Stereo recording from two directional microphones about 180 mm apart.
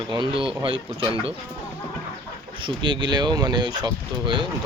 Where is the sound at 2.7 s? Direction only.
25° right (ahead or behind).